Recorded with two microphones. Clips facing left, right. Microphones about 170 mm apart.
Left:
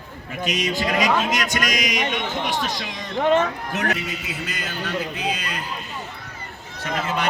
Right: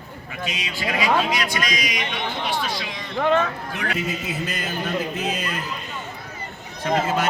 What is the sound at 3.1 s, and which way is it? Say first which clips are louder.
Speech: left 1 dB; 20° left (ahead or behind).